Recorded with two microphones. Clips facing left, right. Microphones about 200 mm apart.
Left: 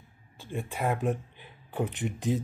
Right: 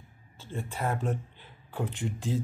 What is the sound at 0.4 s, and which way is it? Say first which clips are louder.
Speech: left 2 dB; 15° left (ahead or behind).